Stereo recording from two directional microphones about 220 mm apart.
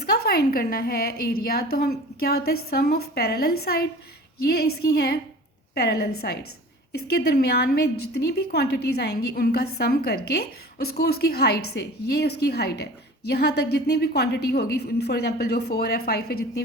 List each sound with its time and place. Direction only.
0.0 s a woman's voice: 45° left (ahead or behind)